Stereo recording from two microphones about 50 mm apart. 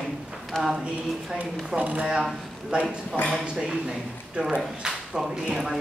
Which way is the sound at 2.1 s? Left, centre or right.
Centre.